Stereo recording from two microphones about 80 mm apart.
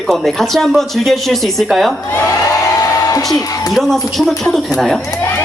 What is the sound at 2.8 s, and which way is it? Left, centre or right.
Music, left.